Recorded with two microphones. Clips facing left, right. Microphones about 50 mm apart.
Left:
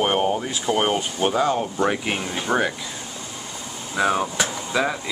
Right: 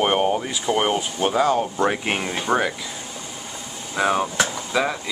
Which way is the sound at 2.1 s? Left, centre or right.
Right.